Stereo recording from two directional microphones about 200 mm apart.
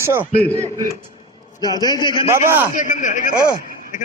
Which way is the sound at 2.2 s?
15° right (ahead or behind).